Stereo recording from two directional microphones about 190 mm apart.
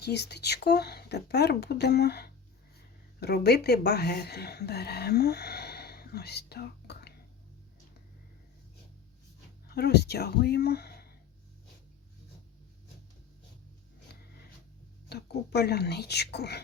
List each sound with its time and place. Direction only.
0.0 s speech: 60° left (ahead or behind)
9.6 s speech: 60° left (ahead or behind)
15.1 s speech: 60° left (ahead or behind)